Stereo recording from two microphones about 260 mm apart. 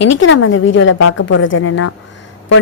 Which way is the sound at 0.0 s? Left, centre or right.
Left.